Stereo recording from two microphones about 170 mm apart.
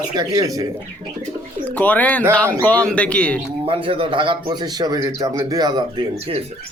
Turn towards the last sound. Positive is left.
turn(degrees=-25)  # may be behind; listen again after turning